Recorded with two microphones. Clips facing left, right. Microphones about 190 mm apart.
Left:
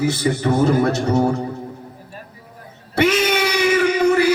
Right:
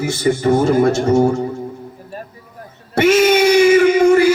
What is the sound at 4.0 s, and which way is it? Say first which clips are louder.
Music: right 5 dB; 45° right (ahead or behind).